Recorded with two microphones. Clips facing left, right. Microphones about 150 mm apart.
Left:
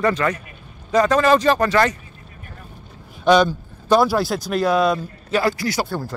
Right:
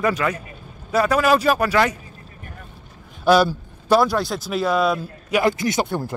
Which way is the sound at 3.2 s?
5° right (ahead or behind).